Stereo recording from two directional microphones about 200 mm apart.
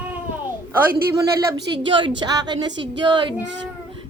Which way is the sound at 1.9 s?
25° right (ahead or behind).